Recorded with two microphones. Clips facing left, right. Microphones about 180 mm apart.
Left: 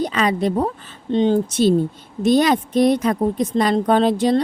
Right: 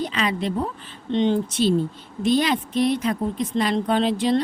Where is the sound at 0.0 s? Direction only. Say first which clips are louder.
Left 5 dB; 45° left (ahead or behind).